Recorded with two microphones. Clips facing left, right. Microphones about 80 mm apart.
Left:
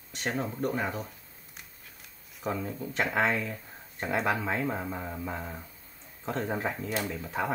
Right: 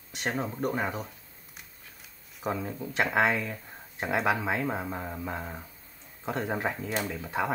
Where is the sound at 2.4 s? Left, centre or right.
Centre.